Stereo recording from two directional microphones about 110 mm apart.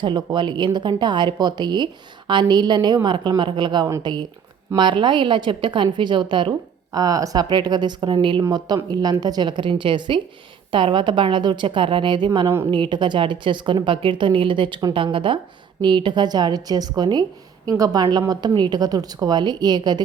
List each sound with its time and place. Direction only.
0.0 s a woman's voice: 45° right (ahead or behind)
6.9 s a woman's voice: 35° right (ahead or behind)